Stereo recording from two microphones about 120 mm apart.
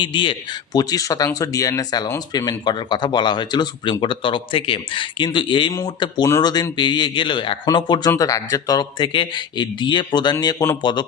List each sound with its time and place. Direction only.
0.0 s speech: 40° left (ahead or behind)
8.1 s speech: 25° left (ahead or behind)